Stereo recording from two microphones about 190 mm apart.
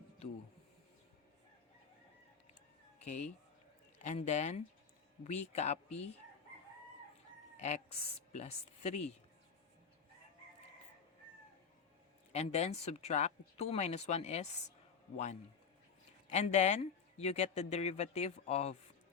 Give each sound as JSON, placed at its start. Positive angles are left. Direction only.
{"t": 3.0, "sound": "speech", "side_deg": 35}
{"t": 7.5, "sound": "a sound", "side_deg": 35}
{"t": 8.3, "sound": "speech", "side_deg": 35}
{"t": 12.3, "sound": "speech", "side_deg": 35}